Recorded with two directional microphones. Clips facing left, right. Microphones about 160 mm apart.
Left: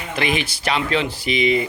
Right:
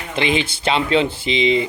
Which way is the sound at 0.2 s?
25° right (ahead or behind).